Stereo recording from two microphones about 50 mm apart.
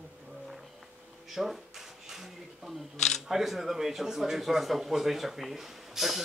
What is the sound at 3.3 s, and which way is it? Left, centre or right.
Speech, centre.